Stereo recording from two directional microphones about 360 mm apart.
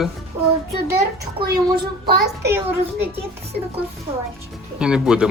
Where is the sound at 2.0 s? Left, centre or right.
Right.